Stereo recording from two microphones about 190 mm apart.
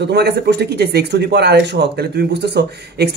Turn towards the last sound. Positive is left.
turn(degrees=-60)  # may be behind; listen again after turning